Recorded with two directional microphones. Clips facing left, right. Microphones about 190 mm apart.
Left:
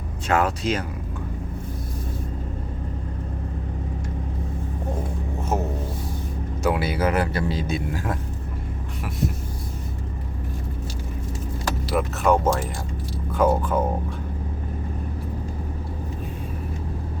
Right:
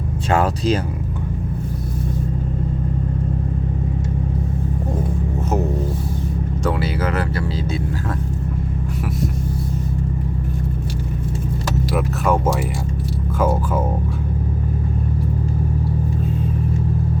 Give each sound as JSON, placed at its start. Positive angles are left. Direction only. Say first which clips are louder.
{"t": 0.3, "sound": "speech", "louder": "right 3 dB", "side_deg": -30}
{"t": 6.7, "sound": "speech", "louder": "left 1 dB", "side_deg": 15}
{"t": 11.9, "sound": "speech", "louder": "even", "side_deg": 0}